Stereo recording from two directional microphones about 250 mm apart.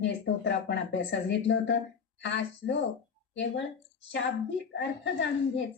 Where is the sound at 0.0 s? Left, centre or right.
Left.